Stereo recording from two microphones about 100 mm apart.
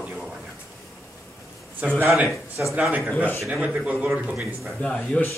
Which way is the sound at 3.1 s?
15° left (ahead or behind).